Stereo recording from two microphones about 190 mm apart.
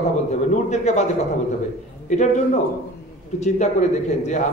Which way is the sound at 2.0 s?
40° left (ahead or behind).